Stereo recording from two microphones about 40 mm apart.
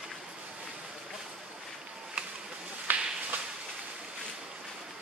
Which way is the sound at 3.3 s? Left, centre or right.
Right.